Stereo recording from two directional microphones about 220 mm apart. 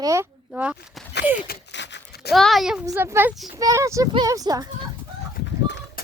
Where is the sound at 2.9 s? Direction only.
10° right (ahead or behind).